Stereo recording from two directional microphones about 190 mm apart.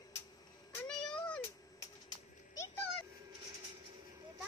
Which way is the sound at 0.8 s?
5° left (ahead or behind).